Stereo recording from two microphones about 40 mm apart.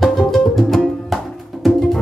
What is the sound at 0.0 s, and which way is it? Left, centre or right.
Music, centre.